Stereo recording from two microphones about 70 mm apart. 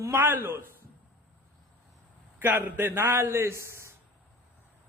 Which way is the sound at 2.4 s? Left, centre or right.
Right.